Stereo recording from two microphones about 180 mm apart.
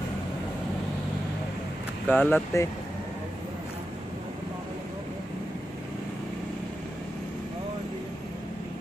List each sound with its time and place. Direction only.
2.0 s speech: 10° left (ahead or behind)